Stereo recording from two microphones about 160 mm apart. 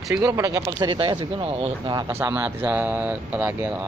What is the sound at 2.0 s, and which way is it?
Speech, 15° right (ahead or behind).